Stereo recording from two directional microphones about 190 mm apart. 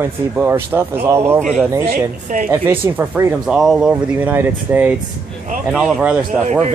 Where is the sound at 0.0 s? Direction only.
10° right (ahead or behind).